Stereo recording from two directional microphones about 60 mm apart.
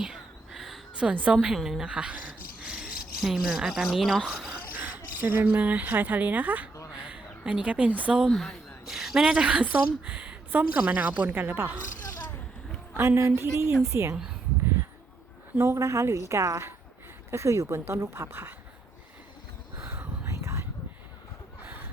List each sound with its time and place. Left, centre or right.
0.0 s a sound: centre
0.9 s speech: right
1.5 s speech: centre
1.8 s a sound: centre
3.2 s speech: centre
4.8 s speech: right
8.3 s speech: centre; by 11.3 s right
11.3 s speech: right
13.0 s speech: right
15.5 s speech: right
19.8 s a sound: right
20.2 s whispering: right